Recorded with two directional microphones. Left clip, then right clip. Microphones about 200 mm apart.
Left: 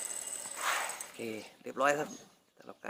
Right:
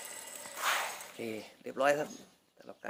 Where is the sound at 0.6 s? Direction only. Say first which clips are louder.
Right 1 dB; 30° right (ahead or behind).